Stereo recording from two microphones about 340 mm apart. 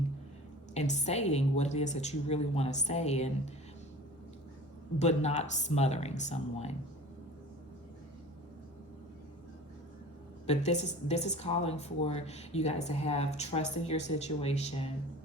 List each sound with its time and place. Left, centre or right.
0.7 s a woman's voice: centre
4.9 s a woman's voice: centre
10.4 s a woman's voice: centre